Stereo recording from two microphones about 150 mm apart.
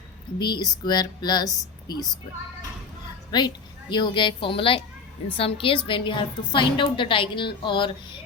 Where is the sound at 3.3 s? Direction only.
30° left (ahead or behind).